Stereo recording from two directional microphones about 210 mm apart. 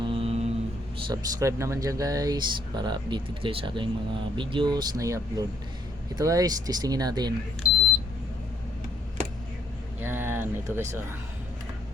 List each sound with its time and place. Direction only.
0.0 s mantra: 25° right (ahead or behind)
1.0 s speech: 15° right (ahead or behind)
10.0 s a sound: 10° right (ahead or behind)